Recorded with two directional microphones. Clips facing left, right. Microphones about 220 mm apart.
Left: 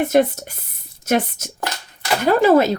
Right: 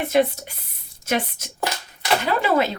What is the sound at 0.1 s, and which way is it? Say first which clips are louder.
Speech: left 1 dB; 45° left (ahead or behind).